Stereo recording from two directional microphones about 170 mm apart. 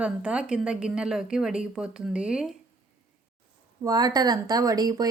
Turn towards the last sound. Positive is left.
turn(degrees=-20)  # may be behind; listen again after turning